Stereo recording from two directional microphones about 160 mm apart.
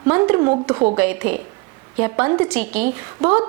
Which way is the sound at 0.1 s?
15° right (ahead or behind).